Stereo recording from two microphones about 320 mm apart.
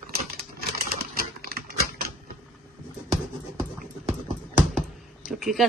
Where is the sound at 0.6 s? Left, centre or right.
Right.